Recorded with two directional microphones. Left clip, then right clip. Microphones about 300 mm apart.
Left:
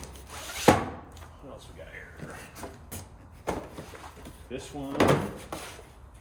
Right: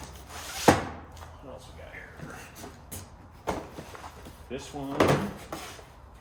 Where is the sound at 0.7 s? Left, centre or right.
Centre.